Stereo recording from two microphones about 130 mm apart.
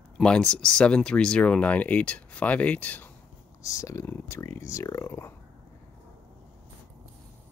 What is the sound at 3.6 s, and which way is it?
Speech, 25° left (ahead or behind).